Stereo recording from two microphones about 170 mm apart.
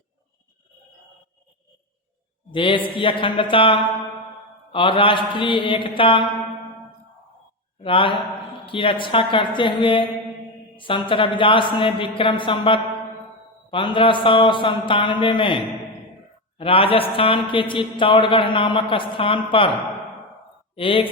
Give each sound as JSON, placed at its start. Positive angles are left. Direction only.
{"t": 2.5, "sound": "speech", "side_deg": 30}
{"t": 7.8, "sound": "a man's voice", "side_deg": 30}